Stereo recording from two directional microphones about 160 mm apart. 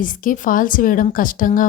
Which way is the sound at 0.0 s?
55° left (ahead or behind).